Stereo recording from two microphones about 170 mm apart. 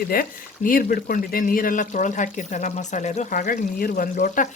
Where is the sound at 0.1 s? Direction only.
55° left (ahead or behind).